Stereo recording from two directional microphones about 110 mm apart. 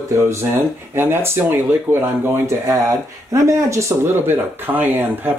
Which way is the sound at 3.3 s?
30° right (ahead or behind).